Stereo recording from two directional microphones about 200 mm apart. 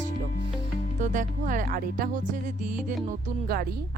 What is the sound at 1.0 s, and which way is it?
Speech, 40° right (ahead or behind).